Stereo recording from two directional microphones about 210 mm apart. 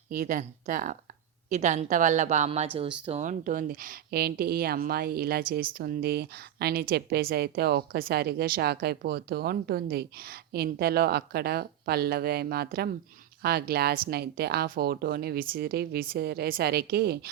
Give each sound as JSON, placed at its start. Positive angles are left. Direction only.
{"t": 0.1, "sound": "a woman's voice", "side_deg": -40}